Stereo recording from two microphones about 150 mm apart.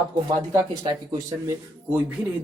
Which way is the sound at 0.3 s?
25° right (ahead or behind).